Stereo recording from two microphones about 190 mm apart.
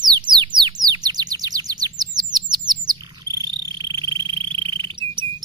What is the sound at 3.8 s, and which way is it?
Insect, 25° right (ahead or behind).